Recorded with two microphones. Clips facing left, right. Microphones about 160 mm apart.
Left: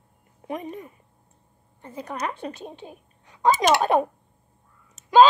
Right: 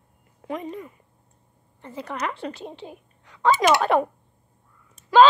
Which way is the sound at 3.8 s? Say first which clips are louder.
Even; 20° left (ahead or behind).